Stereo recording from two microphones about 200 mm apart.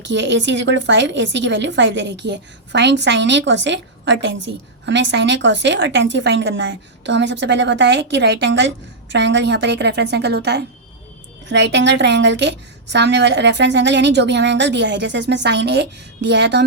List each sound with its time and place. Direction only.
0.0 s a woman's voice: 60° right (ahead or behind)